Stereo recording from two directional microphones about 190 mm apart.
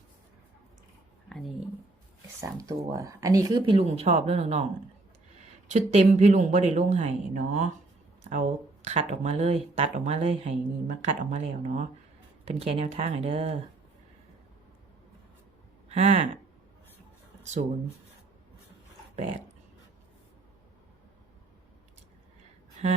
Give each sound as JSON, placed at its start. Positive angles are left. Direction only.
{"t": 1.3, "sound": "speech", "side_deg": 0}
{"t": 2.4, "sound": "speech", "side_deg": -15}
{"t": 5.6, "sound": "speech", "side_deg": -35}
{"t": 15.9, "sound": "speech", "side_deg": -30}
{"t": 17.4, "sound": "speech", "side_deg": -40}